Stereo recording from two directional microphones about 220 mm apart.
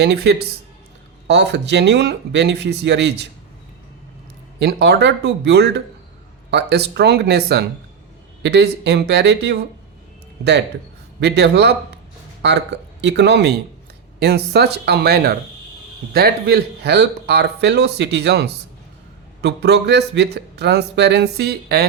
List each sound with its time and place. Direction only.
0.0 s speech: 50° right (ahead or behind)
4.6 s speech: 50° right (ahead or behind)
11.2 s speech: 50° right (ahead or behind)